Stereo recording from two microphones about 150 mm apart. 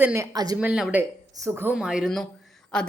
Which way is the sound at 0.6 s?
10° right (ahead or behind).